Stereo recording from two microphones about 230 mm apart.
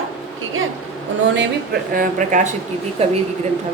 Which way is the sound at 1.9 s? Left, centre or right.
Right.